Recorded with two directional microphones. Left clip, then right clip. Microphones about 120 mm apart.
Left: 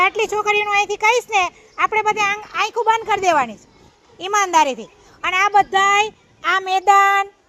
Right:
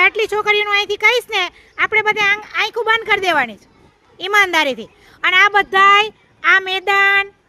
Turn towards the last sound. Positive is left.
turn(degrees=-20)  # may be behind; listen again after turning